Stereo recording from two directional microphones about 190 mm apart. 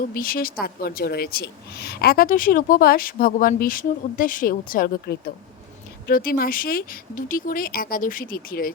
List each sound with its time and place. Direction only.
0.1 s a woman's voice: 50° left (ahead or behind)